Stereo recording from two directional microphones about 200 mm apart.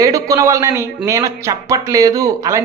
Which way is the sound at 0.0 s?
15° right (ahead or behind).